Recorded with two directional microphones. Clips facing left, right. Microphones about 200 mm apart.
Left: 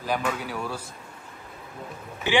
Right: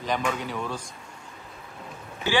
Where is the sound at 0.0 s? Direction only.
5° left (ahead or behind).